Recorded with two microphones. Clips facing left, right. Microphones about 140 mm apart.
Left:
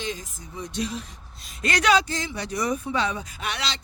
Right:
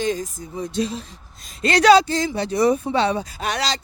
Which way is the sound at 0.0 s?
40° right (ahead or behind).